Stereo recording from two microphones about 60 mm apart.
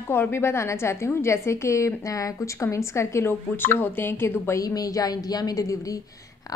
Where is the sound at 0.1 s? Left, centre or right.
Left.